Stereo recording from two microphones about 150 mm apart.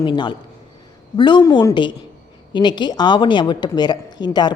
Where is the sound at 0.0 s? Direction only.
30° left (ahead or behind).